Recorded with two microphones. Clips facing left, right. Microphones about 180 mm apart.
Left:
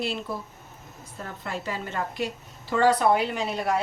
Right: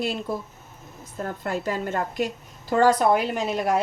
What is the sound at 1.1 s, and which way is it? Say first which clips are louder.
A woman's voice: right 6 dB; 45° right (ahead or behind).